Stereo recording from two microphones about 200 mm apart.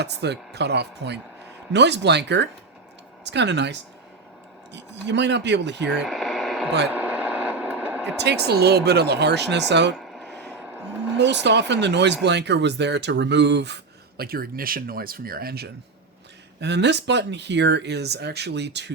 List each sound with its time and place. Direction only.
0.0 s speech: 55° right (ahead or behind)
6.0 s radio: centre (ahead or behind)
8.2 s speech: 55° right (ahead or behind)
9.9 s a sound: centre (ahead or behind)
10.6 s a sound: 5° right (ahead or behind)
11.2 s speech: 60° right (ahead or behind)